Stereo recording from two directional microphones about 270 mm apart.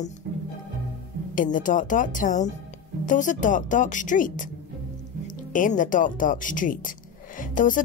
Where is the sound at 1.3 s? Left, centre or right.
Left.